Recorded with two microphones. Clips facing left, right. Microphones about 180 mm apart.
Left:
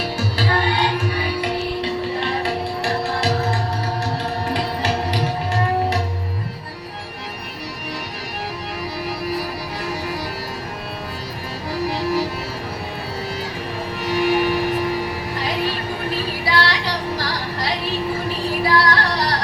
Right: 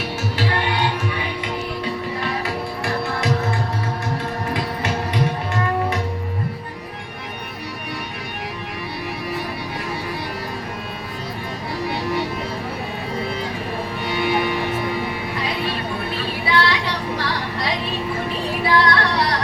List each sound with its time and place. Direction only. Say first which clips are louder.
0.2 s music: left 1 dB; 35° left (ahead or behind)
14.0 s music: left 3 dB; 40° left (ahead or behind)
16.5 s music: right 1 dB; 35° left (ahead or behind)